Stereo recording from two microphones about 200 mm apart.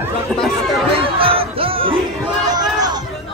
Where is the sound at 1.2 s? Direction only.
25° right (ahead or behind).